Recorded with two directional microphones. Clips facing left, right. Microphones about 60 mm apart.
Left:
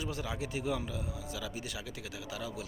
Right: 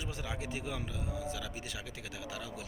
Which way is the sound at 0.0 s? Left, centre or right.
Right.